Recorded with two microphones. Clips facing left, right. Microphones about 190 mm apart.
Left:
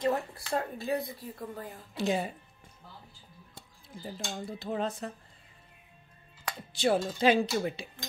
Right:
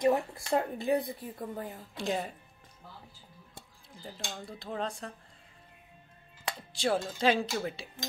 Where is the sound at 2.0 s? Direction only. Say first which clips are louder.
Left 3 dB; 5° left (ahead or behind).